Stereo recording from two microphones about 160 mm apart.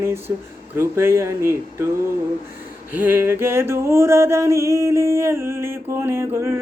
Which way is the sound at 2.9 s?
10° right (ahead or behind).